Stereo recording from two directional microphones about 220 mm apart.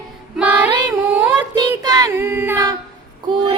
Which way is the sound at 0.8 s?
10° right (ahead or behind).